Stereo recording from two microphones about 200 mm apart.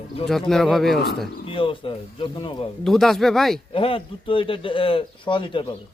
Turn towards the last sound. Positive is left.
turn(degrees=25)  # may be behind; listen again after turning